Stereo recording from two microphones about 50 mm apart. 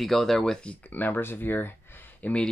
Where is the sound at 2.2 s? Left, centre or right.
Left.